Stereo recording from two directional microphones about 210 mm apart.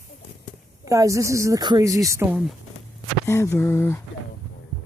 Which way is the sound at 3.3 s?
10° left (ahead or behind).